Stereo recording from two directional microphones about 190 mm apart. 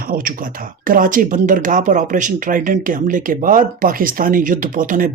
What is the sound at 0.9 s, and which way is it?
Speech, 45° right (ahead or behind).